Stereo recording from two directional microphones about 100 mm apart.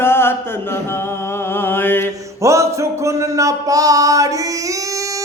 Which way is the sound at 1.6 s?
20° left (ahead or behind).